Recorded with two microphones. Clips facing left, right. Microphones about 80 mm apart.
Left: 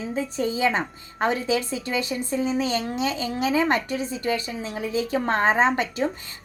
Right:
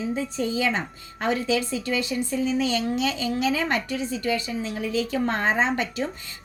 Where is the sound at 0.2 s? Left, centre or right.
Left.